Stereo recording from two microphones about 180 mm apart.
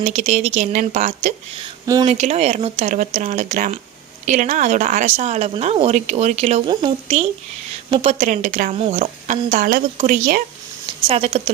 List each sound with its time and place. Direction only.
0.0 s a woman's voice: 35° right (ahead or behind)
10.8 s speech: 30° right (ahead or behind)